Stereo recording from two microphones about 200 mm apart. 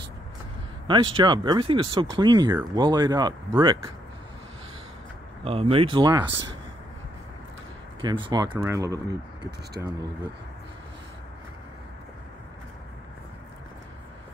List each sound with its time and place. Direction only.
0.8 s speech: 25° right (ahead or behind)
5.4 s speech: 30° right (ahead or behind)
8.0 s speech: 25° right (ahead or behind)